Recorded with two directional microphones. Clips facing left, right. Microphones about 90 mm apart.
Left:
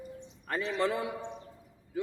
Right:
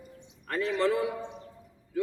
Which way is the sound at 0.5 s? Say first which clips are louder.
Right 4 dB; 20° left (ahead or behind).